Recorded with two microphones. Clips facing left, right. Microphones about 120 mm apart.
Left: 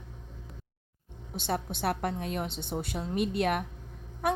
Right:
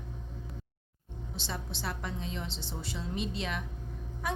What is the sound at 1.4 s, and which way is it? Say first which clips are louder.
A woman's voice: left 8 dB; 55° left (ahead or behind).